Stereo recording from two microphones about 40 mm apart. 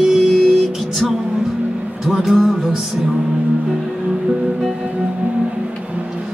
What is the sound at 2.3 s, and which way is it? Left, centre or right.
Music, centre.